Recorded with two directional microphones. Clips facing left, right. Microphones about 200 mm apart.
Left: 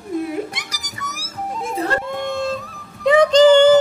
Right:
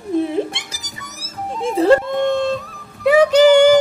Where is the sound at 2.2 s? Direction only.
5° left (ahead or behind).